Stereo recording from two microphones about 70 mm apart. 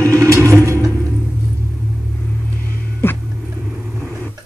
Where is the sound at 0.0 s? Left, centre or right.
Right.